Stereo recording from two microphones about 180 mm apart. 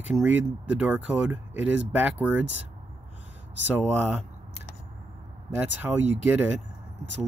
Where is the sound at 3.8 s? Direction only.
10° right (ahead or behind).